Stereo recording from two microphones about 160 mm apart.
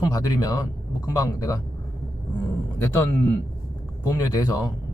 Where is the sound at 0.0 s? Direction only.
25° left (ahead or behind).